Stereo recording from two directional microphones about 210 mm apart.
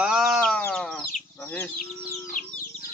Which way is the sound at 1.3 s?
10° left (ahead or behind).